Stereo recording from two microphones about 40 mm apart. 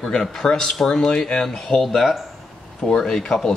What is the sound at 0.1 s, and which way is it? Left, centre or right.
Speech, centre.